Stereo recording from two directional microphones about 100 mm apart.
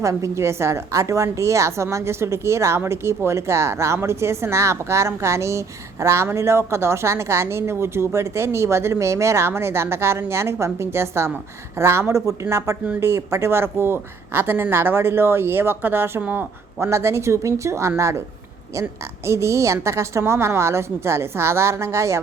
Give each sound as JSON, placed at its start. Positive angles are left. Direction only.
{"t": 0.0, "sound": "a woman's voice", "side_deg": -30}